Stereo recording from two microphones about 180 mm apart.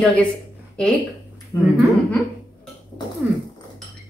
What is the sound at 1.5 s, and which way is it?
Speech, 15° left (ahead or behind).